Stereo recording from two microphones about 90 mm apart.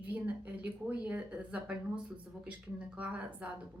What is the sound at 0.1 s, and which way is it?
Speech, 15° right (ahead or behind).